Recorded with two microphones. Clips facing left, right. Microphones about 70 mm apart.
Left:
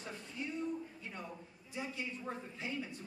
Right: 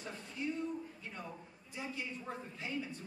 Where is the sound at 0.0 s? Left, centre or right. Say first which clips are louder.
Right 2 dB; centre.